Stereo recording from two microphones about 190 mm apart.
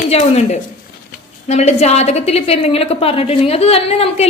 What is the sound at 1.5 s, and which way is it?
A woman's voice, 35° left (ahead or behind).